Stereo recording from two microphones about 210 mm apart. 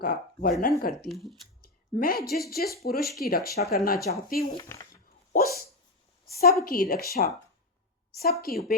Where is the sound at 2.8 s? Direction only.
45° left (ahead or behind).